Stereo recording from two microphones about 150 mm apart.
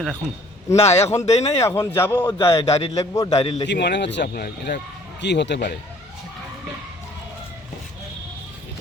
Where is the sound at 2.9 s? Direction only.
20° left (ahead or behind).